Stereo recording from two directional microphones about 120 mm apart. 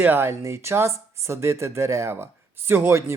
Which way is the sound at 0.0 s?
15° right (ahead or behind).